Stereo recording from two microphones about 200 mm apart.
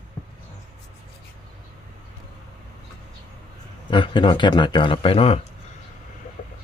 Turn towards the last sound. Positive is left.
turn(degrees=30)  # may be behind; listen again after turning